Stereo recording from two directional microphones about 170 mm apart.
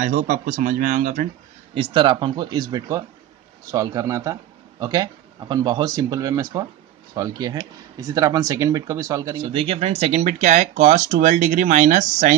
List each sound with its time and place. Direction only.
0.0 s speech: 50° right (ahead or behind)
1.7 s speech: 30° right (ahead or behind)
9.4 s speech: 35° right (ahead or behind)